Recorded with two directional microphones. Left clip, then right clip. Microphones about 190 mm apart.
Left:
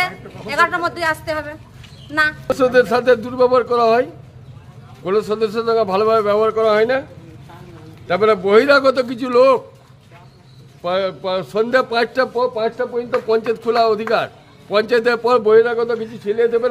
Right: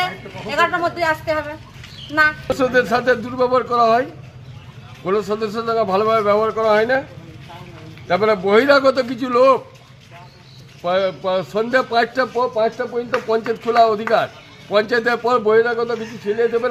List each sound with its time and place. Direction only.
0.5 s speech: 10° left (ahead or behind)
2.4 s a man's voice: 30° left (ahead or behind)
8.1 s a man's voice: 25° left (ahead or behind)
10.8 s a man's voice: 20° left (ahead or behind)